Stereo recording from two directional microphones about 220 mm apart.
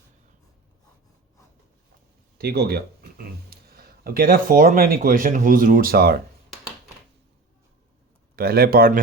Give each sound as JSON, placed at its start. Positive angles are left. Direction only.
{"t": 2.4, "sound": "speech", "side_deg": -45}
{"t": 8.4, "sound": "speech", "side_deg": -45}